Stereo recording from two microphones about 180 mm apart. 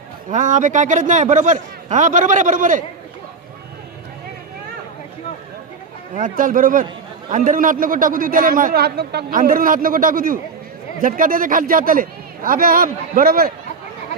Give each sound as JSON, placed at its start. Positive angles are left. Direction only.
{"t": 0.3, "sound": "a man's voice", "side_deg": -45}
{"t": 6.1, "sound": "a man's voice", "side_deg": -50}